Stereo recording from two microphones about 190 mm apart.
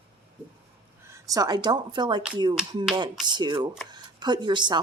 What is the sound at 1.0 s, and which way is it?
Speech, 15° right (ahead or behind).